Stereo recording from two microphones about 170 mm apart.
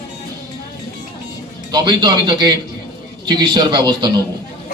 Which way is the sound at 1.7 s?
25° right (ahead or behind).